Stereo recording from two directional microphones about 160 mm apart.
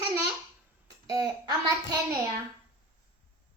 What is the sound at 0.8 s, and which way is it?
A woman's voice, 20° right (ahead or behind).